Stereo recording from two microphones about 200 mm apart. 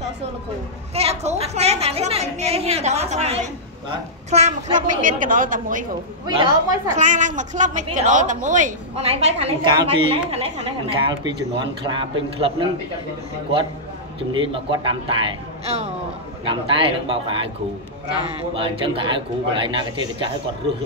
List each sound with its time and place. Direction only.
0.9 s a woman's voice: 30° right (ahead or behind)
6.2 s speech: 20° right (ahead or behind)
7.0 s a woman's voice: 40° right (ahead or behind)
14.3 s speech: 25° right (ahead or behind)
18.5 s speech: 25° right (ahead or behind)